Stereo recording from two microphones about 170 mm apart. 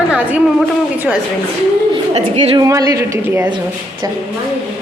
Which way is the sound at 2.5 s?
20° right (ahead or behind).